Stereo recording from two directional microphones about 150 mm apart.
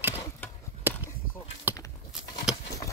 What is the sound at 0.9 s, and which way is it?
Chop, 15° right (ahead or behind).